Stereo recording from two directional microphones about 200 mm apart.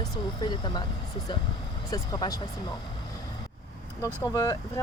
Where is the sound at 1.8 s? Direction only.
20° left (ahead or behind).